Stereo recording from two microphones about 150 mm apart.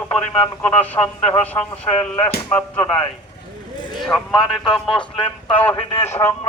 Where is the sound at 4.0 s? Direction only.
5° left (ahead or behind).